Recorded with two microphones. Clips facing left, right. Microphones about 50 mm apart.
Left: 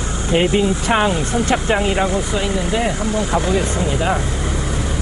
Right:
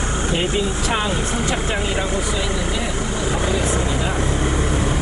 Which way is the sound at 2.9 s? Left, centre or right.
Centre.